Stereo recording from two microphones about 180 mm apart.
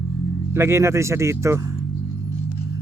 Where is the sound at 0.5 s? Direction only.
15° right (ahead or behind).